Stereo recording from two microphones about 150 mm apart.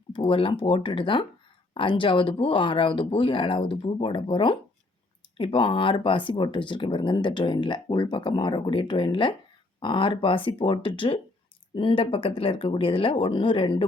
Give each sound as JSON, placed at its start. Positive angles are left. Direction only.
{"t": 0.1, "sound": "speech", "side_deg": 35}